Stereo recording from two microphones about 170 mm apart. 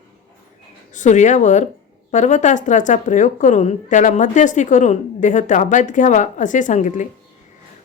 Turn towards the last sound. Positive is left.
turn(degrees=45)  # may be behind; listen again after turning